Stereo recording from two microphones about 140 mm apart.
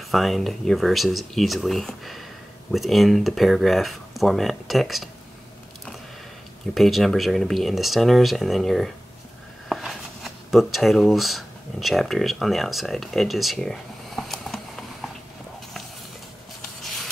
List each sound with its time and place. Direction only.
0.1 s speech: centre (ahead or behind)
6.7 s speech: centre (ahead or behind)